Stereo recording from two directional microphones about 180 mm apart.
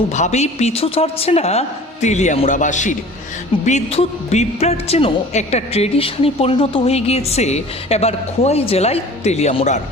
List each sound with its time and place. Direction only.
0.1 s a woman's voice: 40° left (ahead or behind)